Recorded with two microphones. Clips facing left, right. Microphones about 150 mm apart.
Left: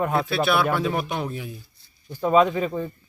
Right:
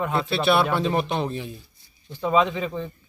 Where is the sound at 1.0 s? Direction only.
25° right (ahead or behind).